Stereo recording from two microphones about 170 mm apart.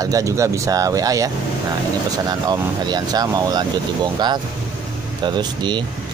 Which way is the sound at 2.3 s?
25° right (ahead or behind).